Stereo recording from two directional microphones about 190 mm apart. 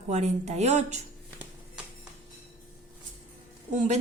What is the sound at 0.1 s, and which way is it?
Speech, 35° right (ahead or behind).